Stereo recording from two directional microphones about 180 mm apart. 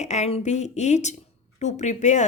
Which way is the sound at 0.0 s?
40° left (ahead or behind).